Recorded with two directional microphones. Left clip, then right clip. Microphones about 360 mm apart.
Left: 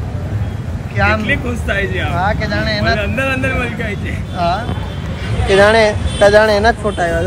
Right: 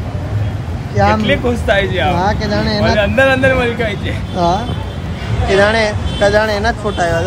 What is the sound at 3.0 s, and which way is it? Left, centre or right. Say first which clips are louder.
Speech: right 6 dB; right.